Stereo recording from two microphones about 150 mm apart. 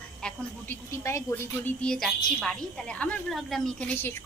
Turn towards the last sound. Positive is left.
turn(degrees=15)  # may be behind; listen again after turning